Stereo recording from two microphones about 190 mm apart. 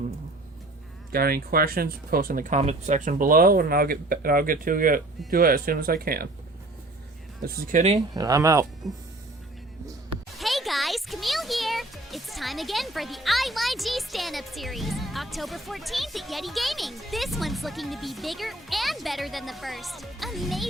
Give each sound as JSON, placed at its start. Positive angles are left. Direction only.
{"t": 1.1, "sound": "speech", "side_deg": -50}
{"t": 7.4, "sound": "speech", "side_deg": -40}
{"t": 8.1, "sound": "speech", "side_deg": -20}
{"t": 8.8, "sound": "speech", "side_deg": 0}
{"t": 10.3, "sound": "a child's voice", "side_deg": 0}